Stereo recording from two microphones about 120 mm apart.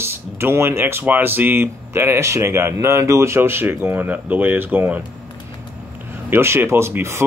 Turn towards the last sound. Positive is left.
turn(degrees=-20)  # may be behind; listen again after turning